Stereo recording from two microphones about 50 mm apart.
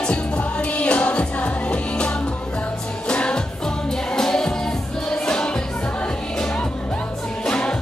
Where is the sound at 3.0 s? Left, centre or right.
Left.